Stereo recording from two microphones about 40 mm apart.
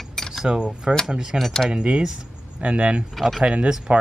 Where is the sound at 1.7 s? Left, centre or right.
Right.